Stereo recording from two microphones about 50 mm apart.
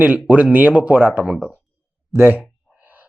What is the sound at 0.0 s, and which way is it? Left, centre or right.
Speech, right.